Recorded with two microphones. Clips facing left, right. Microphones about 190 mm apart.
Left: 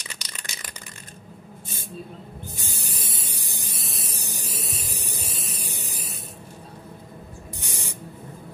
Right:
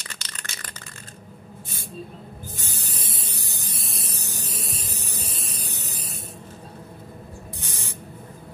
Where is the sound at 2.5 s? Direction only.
15° left (ahead or behind).